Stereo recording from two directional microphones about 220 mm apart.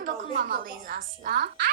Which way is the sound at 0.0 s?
40° right (ahead or behind).